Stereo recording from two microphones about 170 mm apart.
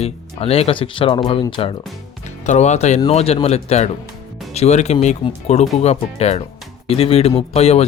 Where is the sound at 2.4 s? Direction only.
45° left (ahead or behind).